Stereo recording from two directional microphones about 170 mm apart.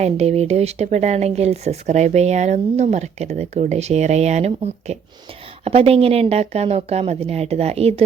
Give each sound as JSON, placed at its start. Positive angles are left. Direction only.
{"t": 0.0, "sound": "speech", "side_deg": -40}